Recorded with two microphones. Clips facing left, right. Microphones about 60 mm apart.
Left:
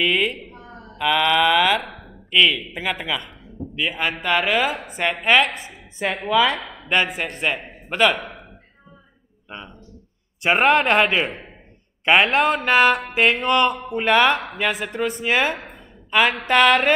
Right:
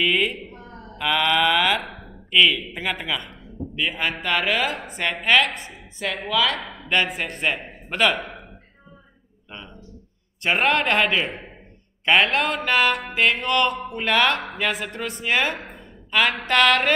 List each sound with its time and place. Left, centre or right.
0.0 s a man's voice: centre
6.0 s speech: left
6.5 s a man's voice: centre
9.5 s a sound: centre
10.4 s a man's voice: centre
16.1 s a sound: centre
16.4 s speech: centre